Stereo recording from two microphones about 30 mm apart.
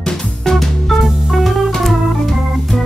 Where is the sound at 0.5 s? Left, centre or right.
Centre.